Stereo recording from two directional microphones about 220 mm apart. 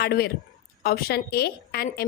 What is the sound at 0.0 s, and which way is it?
A woman's voice, 45° left (ahead or behind).